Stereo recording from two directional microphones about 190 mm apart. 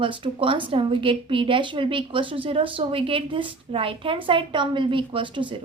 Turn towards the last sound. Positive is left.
turn(degrees=-25)  # may be behind; listen again after turning